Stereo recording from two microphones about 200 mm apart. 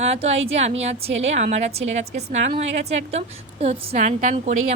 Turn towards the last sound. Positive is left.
turn(degrees=-40)  # may be behind; listen again after turning